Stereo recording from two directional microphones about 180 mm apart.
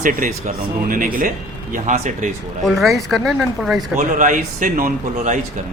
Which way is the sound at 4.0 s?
45° right (ahead or behind).